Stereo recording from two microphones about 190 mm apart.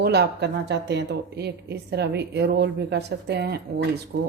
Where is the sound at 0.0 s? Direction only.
60° right (ahead or behind).